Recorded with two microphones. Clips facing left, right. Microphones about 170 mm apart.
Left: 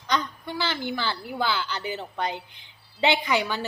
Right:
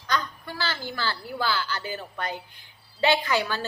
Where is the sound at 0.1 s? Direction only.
20° left (ahead or behind).